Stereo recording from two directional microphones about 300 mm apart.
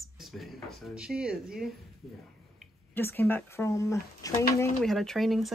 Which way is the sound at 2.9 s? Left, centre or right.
Centre.